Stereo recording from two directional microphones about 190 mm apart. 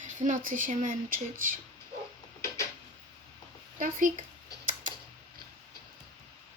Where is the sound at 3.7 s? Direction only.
45° right (ahead or behind).